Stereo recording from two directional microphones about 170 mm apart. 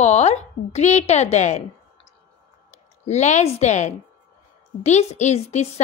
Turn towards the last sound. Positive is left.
turn(degrees=40)  # may be behind; listen again after turning